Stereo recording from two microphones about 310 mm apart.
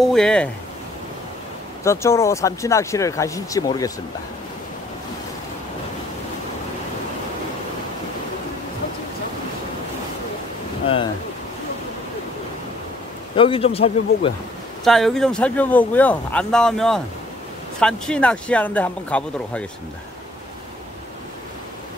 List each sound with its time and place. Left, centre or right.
0.0 s speech: centre
1.9 s speech: centre
13.4 s speech: centre
14.9 s speech: centre